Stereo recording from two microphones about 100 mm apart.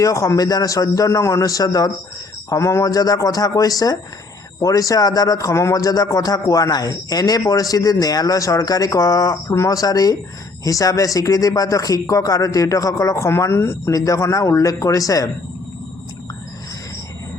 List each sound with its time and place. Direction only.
0.0 s speech: 30° left (ahead or behind)